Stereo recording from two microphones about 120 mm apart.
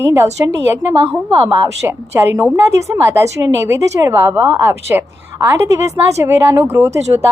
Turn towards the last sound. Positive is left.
turn(degrees=-20)  # may be behind; listen again after turning